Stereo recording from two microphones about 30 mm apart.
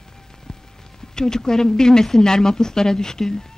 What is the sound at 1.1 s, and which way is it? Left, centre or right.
Speech, centre.